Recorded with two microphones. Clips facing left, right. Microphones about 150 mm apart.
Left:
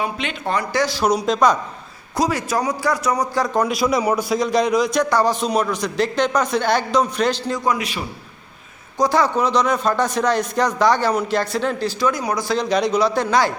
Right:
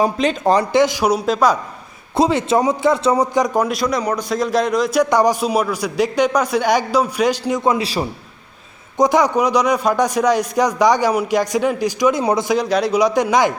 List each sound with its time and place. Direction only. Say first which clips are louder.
0.0 s speech: right 8 dB; 40° right (ahead or behind)
0.7 s a man's voice: right 4 dB; 20° right (ahead or behind)
2.1 s a man's voice: right 5 dB; 25° right (ahead or behind)
3.6 s a man's voice: even; centre (ahead or behind)
5.0 s a man's voice: right 3 dB; 15° right (ahead or behind)
7.6 s speech: right 5 dB; 30° right (ahead or behind)
9.0 s a man's voice: right 3 dB; 15° right (ahead or behind)
12.2 s a man's voice: right 5 dB; 25° right (ahead or behind)
12.5 s a man's voice: right 2 dB; 10° right (ahead or behind)